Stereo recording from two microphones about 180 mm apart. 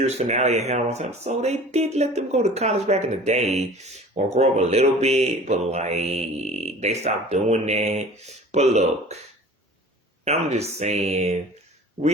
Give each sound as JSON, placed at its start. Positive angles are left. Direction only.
{"t": 0.0, "sound": "speech", "side_deg": -35}
{"t": 10.2, "sound": "speech", "side_deg": -35}